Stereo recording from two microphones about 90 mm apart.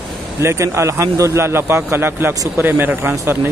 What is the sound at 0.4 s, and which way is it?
Speech, 30° right (ahead or behind).